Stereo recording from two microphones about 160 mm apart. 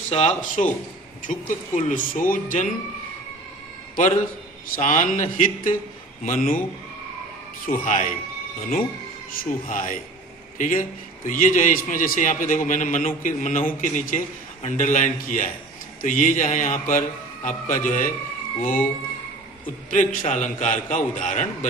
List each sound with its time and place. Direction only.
0.1 s a man's voice: 40° left (ahead or behind); by 2.6 s 60° left (ahead or behind)
4.7 s a man's voice: 55° left (ahead or behind)
7.6 s a man's voice: 55° left (ahead or behind)
9.4 s a man's voice: 60° left (ahead or behind)
19.9 s a man's voice: 55° left (ahead or behind)